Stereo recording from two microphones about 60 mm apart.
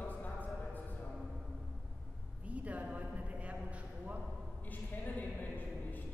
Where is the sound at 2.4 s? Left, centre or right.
Right.